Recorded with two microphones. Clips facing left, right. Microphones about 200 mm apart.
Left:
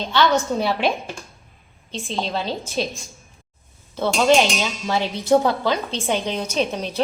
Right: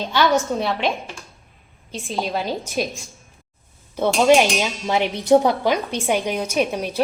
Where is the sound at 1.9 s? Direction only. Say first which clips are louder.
Right 1 dB; 5° right (ahead or behind).